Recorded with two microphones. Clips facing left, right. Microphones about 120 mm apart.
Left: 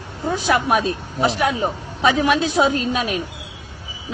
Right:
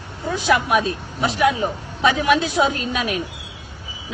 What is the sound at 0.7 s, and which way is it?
A woman's voice, 35° left (ahead or behind).